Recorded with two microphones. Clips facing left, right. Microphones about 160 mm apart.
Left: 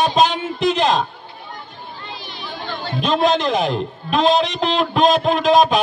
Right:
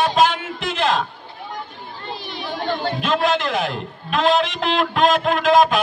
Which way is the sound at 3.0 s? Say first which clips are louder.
Left 5 dB; 20° left (ahead or behind).